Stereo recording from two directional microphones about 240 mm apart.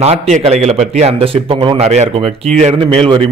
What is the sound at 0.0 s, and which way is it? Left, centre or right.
A man's voice, right.